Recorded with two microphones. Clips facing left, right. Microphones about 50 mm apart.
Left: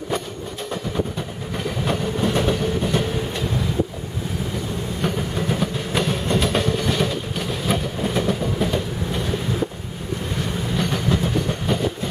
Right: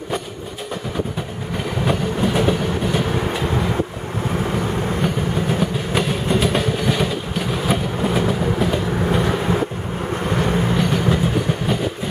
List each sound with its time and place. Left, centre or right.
1.9 s train: centre
5.0 s train: centre
9.1 s vehicle: right
10.3 s vehicle: right
10.8 s train: centre